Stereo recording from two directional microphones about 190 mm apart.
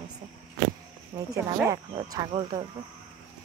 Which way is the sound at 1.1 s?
25° right (ahead or behind).